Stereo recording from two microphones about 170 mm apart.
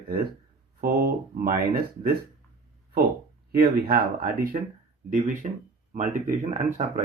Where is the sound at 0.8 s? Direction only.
65° right (ahead or behind).